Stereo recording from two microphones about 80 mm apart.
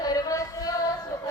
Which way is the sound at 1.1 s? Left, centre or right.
Left.